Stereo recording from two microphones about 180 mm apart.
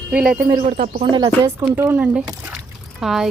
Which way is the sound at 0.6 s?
40° right (ahead or behind).